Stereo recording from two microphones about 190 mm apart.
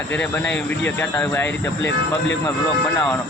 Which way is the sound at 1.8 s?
75° left (ahead or behind).